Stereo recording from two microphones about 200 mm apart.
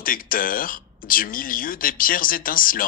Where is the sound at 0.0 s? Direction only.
45° left (ahead or behind).